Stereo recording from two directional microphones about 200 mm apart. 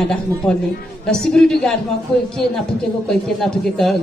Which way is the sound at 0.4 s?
5° left (ahead or behind).